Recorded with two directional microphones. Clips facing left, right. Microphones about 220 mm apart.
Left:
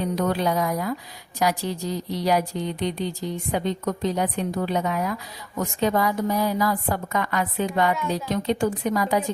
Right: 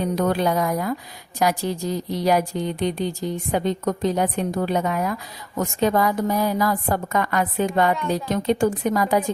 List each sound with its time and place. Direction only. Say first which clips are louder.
0.0 s a woman's voice: right 2 dB; 50° right (ahead or behind)